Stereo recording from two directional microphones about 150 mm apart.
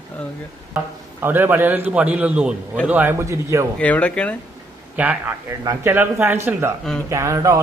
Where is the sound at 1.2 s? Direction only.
15° right (ahead or behind).